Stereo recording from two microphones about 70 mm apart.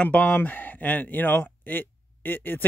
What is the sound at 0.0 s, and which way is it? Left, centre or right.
Speech, left.